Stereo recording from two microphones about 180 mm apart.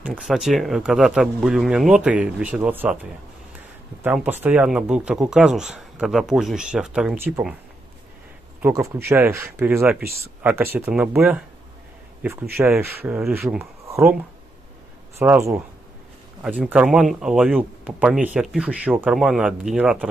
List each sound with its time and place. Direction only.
0.0 s speech: 5° right (ahead or behind)
4.0 s speech: 10° right (ahead or behind)
8.6 s speech: 15° right (ahead or behind)
13.8 s a sound: 15° right (ahead or behind)
15.1 s speech: 15° right (ahead or behind)